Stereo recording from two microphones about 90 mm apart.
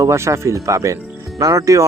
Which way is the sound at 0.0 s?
35° right (ahead or behind).